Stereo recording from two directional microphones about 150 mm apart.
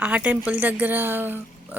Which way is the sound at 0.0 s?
10° right (ahead or behind).